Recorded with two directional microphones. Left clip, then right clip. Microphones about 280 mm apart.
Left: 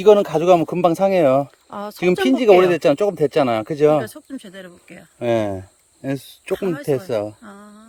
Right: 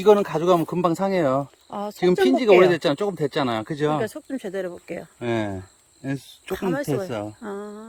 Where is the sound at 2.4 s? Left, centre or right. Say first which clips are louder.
Left 4 dB; left.